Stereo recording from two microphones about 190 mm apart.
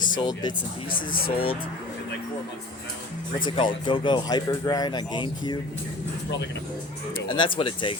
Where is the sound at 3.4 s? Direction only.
25° left (ahead or behind).